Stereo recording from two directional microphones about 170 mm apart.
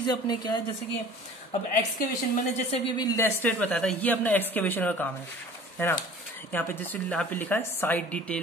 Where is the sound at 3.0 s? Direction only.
20° left (ahead or behind).